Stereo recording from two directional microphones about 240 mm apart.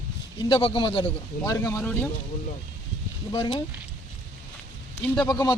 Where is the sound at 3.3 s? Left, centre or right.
Centre.